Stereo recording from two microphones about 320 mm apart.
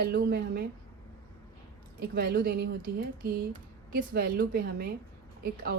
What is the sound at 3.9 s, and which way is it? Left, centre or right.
A woman's voice, right.